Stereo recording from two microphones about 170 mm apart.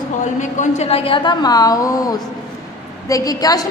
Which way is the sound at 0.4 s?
45° left (ahead or behind).